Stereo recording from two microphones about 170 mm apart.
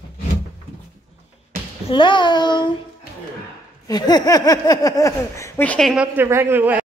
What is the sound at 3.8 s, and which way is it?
Speech, 25° left (ahead or behind).